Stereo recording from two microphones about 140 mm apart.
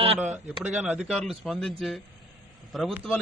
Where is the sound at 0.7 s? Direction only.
Centre (ahead or behind).